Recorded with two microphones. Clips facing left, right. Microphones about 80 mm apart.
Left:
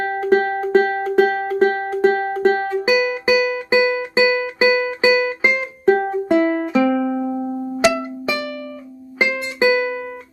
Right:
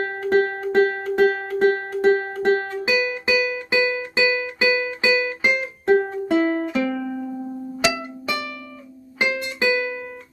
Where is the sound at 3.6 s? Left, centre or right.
Left.